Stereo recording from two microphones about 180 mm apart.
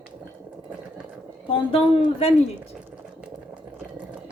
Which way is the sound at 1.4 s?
30° left (ahead or behind).